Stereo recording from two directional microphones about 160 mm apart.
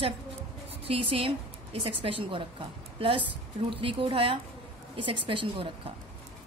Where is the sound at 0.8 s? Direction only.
35° right (ahead or behind).